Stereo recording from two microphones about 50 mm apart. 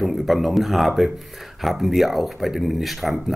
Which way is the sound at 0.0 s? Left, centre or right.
Centre.